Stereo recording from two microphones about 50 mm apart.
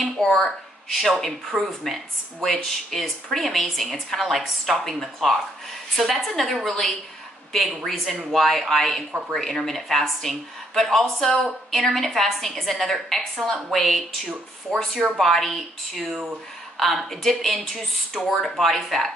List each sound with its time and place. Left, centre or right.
0.2 s a woman's voice: centre